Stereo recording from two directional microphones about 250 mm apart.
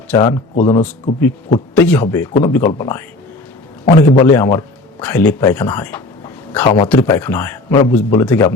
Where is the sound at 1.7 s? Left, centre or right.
Centre.